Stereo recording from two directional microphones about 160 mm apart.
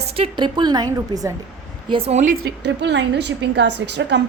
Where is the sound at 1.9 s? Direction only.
40° right (ahead or behind).